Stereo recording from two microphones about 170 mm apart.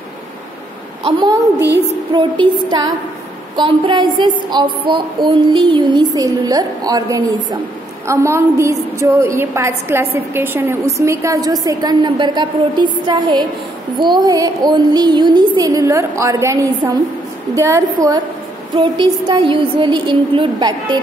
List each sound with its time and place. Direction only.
1.0 s a woman's voice: 25° right (ahead or behind)
3.5 s a woman's voice: 30° right (ahead or behind)